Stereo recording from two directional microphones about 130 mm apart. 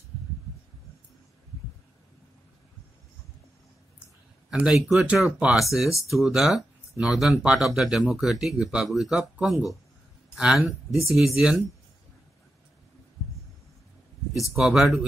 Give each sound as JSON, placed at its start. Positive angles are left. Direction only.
{"t": 4.5, "sound": "speech", "side_deg": -5}
{"t": 14.3, "sound": "speech", "side_deg": 0}